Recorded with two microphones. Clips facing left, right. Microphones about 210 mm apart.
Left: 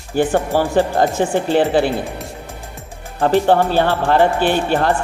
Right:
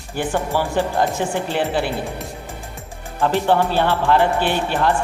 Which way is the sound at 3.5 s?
45° left (ahead or behind).